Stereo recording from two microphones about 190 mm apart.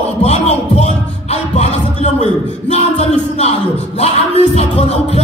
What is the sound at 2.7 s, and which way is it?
Music, 35° left (ahead or behind).